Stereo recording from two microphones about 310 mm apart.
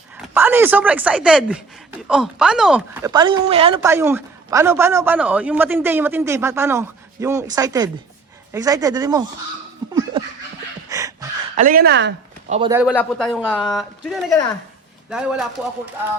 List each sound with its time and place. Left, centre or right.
0.2 s speech: centre
3.1 s a woman's voice: centre
10.8 s a sound: centre
11.5 s speech: right
12.5 s a woman's voice: centre
12.8 s speech: centre